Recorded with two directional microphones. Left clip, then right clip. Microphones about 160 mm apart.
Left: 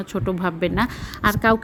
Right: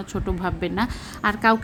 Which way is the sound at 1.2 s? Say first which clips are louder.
Left 1 dB; 20° left (ahead or behind).